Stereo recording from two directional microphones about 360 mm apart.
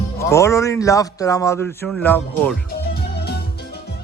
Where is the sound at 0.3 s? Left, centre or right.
Centre.